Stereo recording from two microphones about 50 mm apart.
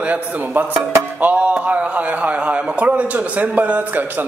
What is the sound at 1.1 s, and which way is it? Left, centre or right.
Music, right.